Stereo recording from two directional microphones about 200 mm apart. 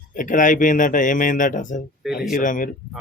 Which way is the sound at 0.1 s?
40° left (ahead or behind).